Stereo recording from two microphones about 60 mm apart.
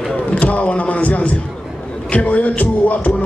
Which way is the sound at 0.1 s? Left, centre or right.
Left.